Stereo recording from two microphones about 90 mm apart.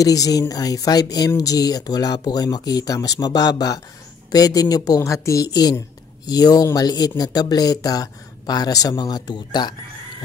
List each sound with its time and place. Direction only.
0.0 s a woman's voice: 40° left (ahead or behind)